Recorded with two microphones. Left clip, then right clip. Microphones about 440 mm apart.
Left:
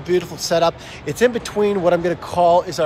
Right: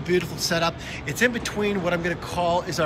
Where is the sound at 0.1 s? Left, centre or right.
Centre.